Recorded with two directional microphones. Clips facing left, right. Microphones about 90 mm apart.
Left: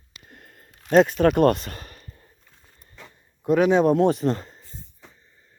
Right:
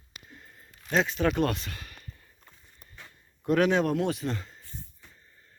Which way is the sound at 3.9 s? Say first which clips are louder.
Left 9 dB; 35° left (ahead or behind).